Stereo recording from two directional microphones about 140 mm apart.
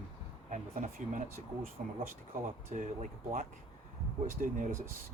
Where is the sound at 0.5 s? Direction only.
65° right (ahead or behind).